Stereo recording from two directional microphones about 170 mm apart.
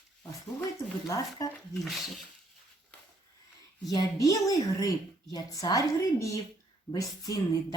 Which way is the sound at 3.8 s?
20° left (ahead or behind).